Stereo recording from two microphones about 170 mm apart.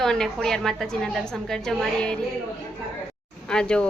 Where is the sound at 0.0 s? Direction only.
Centre (ahead or behind).